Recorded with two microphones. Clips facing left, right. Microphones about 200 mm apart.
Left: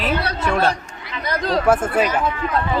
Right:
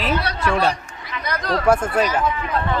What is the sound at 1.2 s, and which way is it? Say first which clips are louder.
Chatter: left 2 dB; 25° left (ahead or behind).